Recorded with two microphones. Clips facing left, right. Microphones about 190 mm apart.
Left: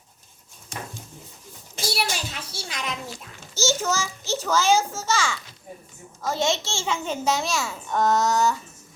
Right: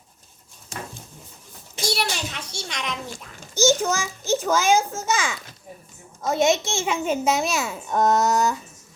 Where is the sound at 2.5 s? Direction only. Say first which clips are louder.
Right 1 dB; 5° left (ahead or behind).